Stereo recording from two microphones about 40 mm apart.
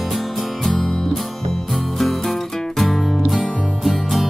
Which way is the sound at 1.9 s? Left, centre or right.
Centre.